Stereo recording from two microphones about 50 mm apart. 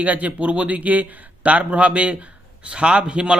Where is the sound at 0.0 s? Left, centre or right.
Right.